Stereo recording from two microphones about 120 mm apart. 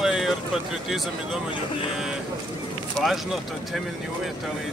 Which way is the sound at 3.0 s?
Centre (ahead or behind).